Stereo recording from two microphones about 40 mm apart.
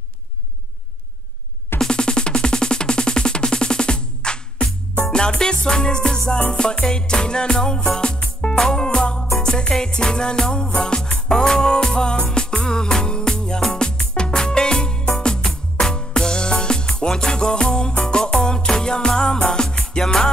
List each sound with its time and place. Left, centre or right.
1.9 s music: left